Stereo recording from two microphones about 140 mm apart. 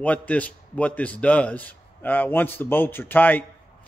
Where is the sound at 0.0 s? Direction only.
10° left (ahead or behind).